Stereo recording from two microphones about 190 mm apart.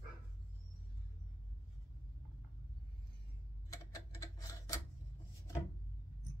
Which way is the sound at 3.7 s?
15° left (ahead or behind).